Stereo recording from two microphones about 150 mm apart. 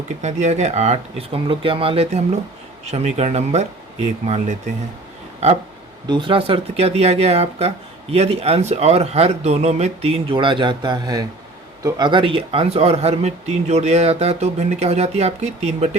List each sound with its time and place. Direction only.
0.2 s speech: 50° right (ahead or behind)
6.1 s speech: 35° right (ahead or behind)